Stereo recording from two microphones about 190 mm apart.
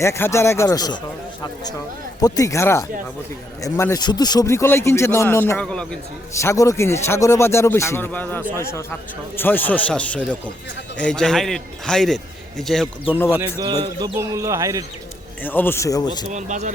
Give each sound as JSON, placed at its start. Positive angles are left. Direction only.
{"t": 0.0, "sound": "speech", "side_deg": 15}
{"t": 2.2, "sound": "speech", "side_deg": 20}
{"t": 6.4, "sound": "a man's voice", "side_deg": 15}
{"t": 13.3, "sound": "speech", "side_deg": -15}
{"t": 15.4, "sound": "speech", "side_deg": 10}
{"t": 16.3, "sound": "speech", "side_deg": -40}